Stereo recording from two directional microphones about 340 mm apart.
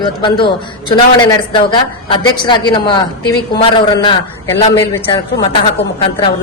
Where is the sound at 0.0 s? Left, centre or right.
Centre.